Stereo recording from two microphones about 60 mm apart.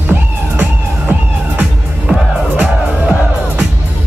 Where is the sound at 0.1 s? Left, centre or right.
Right.